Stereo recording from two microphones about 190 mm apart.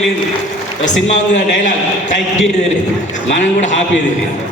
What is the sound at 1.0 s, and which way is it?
A man's voice, 40° left (ahead or behind).